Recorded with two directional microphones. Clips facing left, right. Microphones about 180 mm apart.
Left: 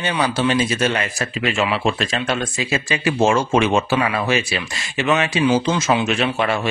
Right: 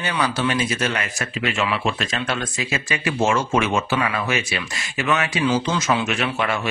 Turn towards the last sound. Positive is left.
turn(degrees=30)  # may be behind; listen again after turning